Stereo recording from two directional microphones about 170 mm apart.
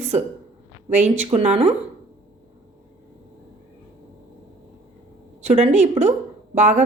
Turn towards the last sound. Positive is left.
turn(degrees=-45)  # may be behind; listen again after turning